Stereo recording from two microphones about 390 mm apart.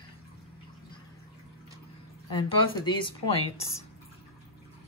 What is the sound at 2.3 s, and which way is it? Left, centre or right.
A woman's voice, centre.